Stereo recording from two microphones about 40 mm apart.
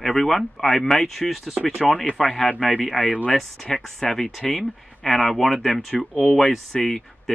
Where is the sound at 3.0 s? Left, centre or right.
Centre.